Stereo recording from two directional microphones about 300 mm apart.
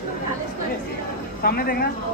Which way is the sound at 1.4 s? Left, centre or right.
Left.